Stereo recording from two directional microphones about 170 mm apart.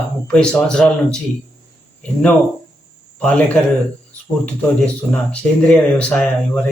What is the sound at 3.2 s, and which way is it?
Speech, 5° left (ahead or behind).